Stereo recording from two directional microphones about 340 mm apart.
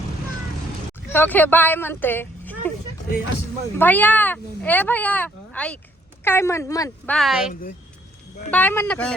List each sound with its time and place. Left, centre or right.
1.1 s speech: centre
3.8 s speech: centre